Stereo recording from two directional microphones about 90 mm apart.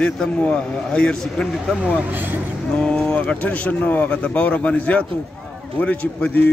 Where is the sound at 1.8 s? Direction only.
20° right (ahead or behind).